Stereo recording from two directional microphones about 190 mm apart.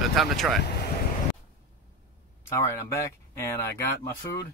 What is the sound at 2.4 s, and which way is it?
Speech, 15° left (ahead or behind).